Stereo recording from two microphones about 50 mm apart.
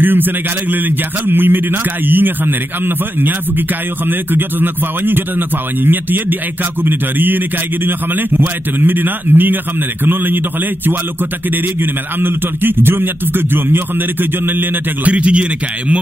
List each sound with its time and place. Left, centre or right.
0.0 s a man's voice: right
11.5 s a man's voice: right
15.0 s a man's voice: right